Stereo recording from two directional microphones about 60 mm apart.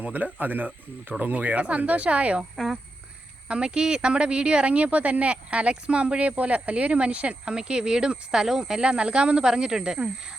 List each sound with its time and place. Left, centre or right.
0.0 s speech: right
3.5 s speech: centre